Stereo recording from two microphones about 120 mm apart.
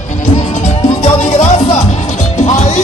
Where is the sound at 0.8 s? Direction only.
70° left (ahead or behind).